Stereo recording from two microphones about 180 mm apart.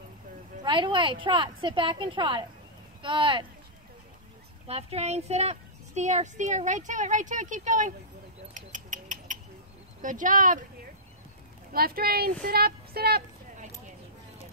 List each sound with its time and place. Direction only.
0.7 s a woman's voice: 25° right (ahead or behind)
4.6 s speech: 35° right (ahead or behind)
8.5 s a sound: 45° right (ahead or behind)
10.0 s speech: 45° right (ahead or behind)
11.7 s speech: 55° right (ahead or behind)